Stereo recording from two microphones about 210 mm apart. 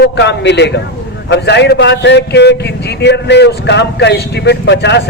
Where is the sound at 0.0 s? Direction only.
55° left (ahead or behind).